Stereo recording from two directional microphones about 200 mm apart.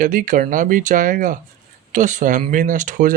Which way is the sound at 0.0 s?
45° right (ahead or behind).